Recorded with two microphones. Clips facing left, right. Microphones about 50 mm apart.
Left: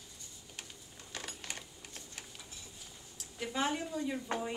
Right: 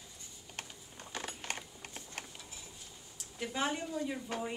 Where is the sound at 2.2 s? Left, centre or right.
Right.